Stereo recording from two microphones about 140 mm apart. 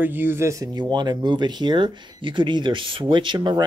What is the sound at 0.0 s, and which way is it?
Speech, 15° right (ahead or behind).